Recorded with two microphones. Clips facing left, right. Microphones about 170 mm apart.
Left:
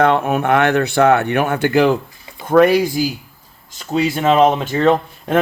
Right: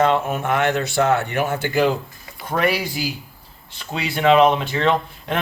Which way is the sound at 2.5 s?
50° left (ahead or behind).